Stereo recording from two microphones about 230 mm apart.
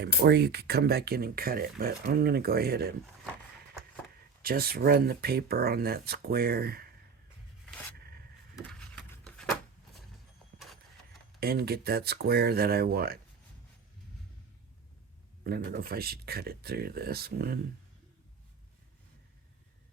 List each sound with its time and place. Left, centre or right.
0.0 s speech: right
4.4 s speech: right
7.9 s a sound: right
8.5 s a sound: centre
11.3 s speech: right
15.4 s speech: right